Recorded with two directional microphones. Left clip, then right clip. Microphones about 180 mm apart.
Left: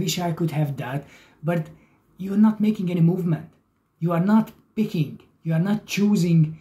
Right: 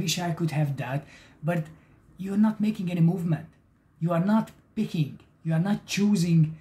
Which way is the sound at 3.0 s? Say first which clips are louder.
Left 5 dB; 15° right (ahead or behind).